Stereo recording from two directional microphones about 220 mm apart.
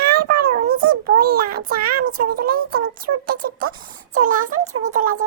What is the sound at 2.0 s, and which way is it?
Speech, 90° right.